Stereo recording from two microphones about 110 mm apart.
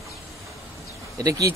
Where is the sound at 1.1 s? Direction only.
30° right (ahead or behind).